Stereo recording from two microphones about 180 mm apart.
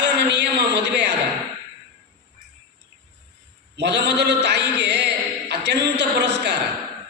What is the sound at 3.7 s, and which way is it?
A man's voice, 70° right (ahead or behind).